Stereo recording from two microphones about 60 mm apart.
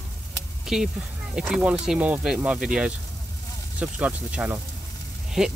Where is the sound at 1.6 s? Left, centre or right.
Right.